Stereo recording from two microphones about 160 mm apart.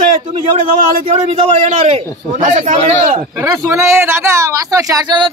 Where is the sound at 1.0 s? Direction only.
40° right (ahead or behind).